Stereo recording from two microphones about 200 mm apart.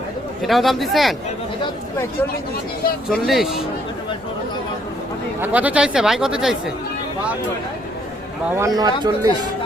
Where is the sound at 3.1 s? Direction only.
Centre (ahead or behind).